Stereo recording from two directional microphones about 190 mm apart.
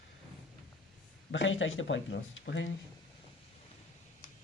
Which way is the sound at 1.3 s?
80° left.